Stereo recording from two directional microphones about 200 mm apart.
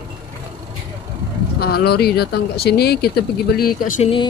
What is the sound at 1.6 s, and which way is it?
Speech, 50° left (ahead or behind).